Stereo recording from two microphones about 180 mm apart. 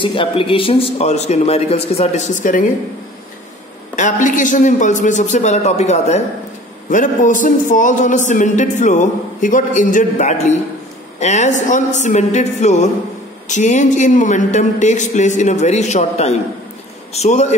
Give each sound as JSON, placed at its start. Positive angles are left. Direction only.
{"t": 0.0, "sound": "speech", "side_deg": 30}
{"t": 3.9, "sound": "speech", "side_deg": 45}